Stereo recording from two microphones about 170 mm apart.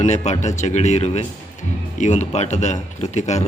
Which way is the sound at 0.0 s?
45° left (ahead or behind).